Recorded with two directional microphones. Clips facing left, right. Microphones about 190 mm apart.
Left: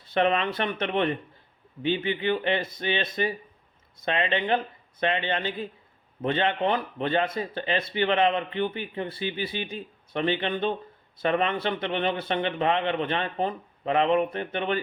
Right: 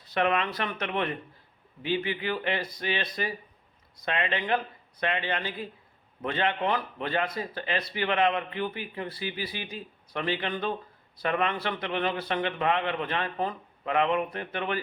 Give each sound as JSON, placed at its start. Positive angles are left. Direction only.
{"t": 0.1, "sound": "speech", "side_deg": 25}